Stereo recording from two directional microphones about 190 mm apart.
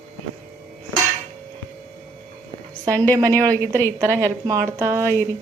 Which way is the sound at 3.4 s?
20° right (ahead or behind).